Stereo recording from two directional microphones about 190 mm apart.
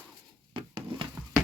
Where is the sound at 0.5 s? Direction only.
25° right (ahead or behind).